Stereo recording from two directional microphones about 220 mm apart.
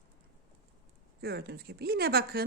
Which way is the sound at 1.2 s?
45° right (ahead or behind).